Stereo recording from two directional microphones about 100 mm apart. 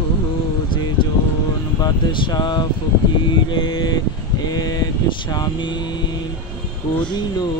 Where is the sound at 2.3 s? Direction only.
45° left (ahead or behind).